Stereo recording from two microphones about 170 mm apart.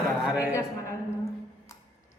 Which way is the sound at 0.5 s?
15° left (ahead or behind).